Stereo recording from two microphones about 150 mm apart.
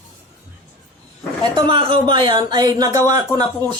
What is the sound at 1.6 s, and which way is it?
Speech, 35° right (ahead or behind).